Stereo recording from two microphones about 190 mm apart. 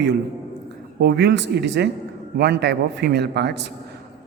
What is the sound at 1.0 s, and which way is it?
A woman's voice, 60° right (ahead or behind).